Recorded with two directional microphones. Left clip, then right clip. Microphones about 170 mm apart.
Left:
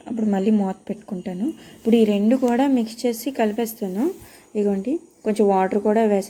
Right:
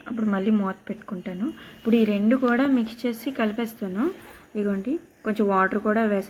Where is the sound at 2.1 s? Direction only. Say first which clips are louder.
Left 2 dB; 15° left (ahead or behind).